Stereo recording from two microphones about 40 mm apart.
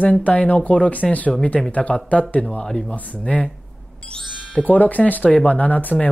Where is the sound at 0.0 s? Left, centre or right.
Left.